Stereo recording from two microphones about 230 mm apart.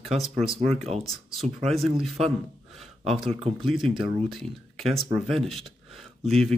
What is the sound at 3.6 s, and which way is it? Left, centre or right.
Speech, centre.